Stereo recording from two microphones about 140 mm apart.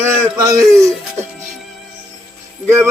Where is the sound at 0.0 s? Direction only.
20° right (ahead or behind).